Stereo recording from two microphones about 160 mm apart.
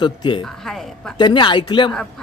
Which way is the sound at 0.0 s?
30° left (ahead or behind).